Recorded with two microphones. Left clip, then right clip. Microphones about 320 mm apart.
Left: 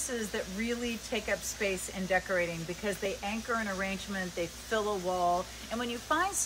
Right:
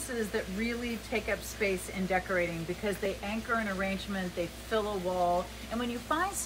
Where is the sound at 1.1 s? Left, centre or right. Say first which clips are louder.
Right 1 dB; centre.